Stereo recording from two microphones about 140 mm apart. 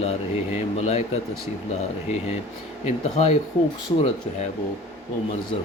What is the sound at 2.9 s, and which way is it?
Speech, 55° left (ahead or behind).